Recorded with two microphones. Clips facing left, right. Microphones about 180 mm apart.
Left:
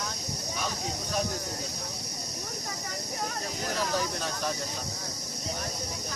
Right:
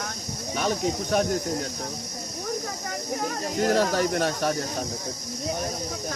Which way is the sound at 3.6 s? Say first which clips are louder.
Right 9 dB; 70° right (ahead or behind).